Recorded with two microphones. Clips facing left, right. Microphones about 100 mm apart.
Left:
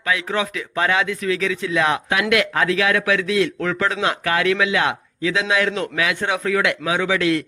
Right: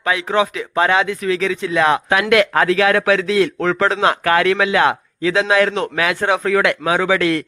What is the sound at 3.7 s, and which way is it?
A man's voice, 45° right (ahead or behind).